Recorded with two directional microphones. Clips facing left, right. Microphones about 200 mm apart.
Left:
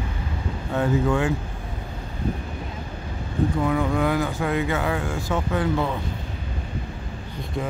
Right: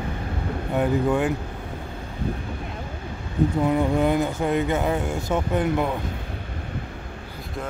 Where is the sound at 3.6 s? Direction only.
25° right (ahead or behind).